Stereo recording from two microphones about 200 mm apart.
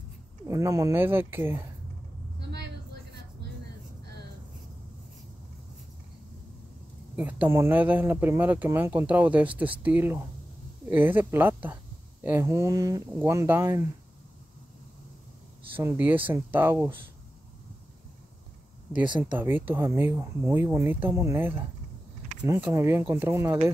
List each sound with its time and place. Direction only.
0.5 s speech: 15° right (ahead or behind)
2.4 s vehicle: 55° right (ahead or behind)
4.0 s vehicle: 55° right (ahead or behind)
7.2 s speech: 10° right (ahead or behind)
15.8 s speech: 10° right (ahead or behind)
19.3 s speech: 10° right (ahead or behind)